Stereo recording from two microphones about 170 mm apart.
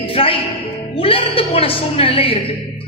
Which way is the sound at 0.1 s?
35° left (ahead or behind).